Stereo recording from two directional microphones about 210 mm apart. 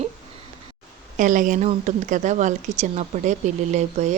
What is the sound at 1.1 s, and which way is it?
Speech, 40° right (ahead or behind).